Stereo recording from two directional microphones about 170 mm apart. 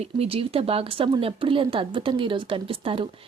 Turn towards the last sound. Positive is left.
turn(degrees=-30)  # may be behind; listen again after turning